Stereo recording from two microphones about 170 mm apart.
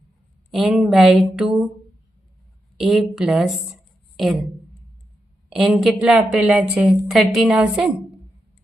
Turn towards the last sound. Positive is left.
turn(degrees=-5)  # may be behind; listen again after turning